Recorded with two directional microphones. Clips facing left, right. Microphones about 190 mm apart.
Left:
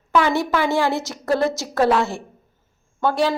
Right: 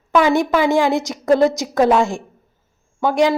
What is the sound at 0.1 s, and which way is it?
A woman's voice, 15° right (ahead or behind).